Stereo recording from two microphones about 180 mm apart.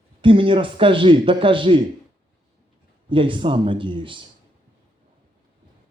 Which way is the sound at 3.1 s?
30° right (ahead or behind).